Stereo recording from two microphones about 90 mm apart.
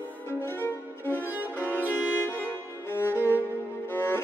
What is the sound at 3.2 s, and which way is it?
Music, 20° right (ahead or behind).